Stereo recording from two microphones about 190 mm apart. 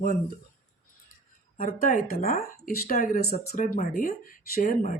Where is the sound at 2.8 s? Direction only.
55° left (ahead or behind).